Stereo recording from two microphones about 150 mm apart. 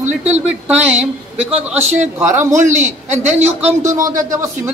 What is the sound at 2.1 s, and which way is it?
Speech, 15° right (ahead or behind).